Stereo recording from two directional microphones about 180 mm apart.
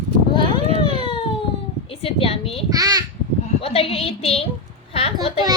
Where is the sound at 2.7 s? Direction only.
20° right (ahead or behind).